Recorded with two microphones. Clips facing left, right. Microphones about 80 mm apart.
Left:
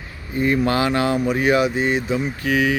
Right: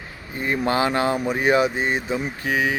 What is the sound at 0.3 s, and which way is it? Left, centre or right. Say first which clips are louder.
Speech: left 3 dB; right.